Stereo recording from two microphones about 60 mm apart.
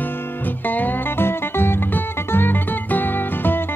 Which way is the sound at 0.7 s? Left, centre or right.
Left.